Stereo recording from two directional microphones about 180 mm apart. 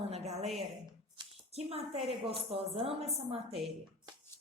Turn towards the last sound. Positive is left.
turn(degrees=-35)  # may be behind; listen again after turning